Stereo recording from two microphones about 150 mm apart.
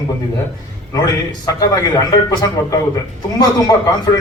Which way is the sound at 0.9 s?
25° left (ahead or behind).